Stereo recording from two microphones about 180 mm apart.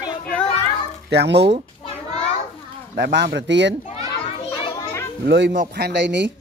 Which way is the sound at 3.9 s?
30° left (ahead or behind).